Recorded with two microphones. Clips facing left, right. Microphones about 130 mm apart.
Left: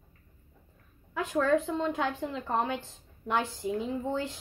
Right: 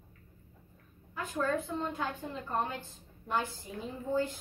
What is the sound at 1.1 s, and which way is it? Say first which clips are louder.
A woman's voice: left 6 dB; 90° left.